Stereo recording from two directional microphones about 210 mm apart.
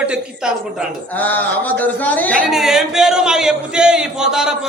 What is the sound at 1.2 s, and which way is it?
Speech, 10° left (ahead or behind).